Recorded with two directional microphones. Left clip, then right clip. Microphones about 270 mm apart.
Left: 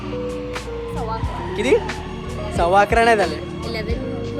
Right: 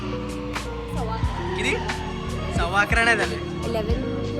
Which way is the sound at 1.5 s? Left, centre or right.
Centre.